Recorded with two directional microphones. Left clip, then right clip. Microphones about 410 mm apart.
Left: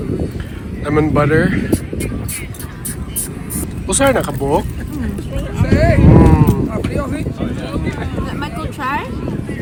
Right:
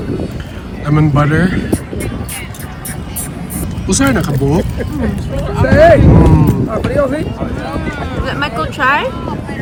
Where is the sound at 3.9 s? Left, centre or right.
Centre.